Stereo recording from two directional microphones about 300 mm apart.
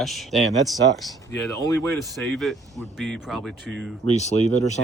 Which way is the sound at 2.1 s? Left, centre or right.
Centre.